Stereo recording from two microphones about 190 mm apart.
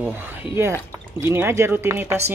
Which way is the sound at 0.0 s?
10° right (ahead or behind).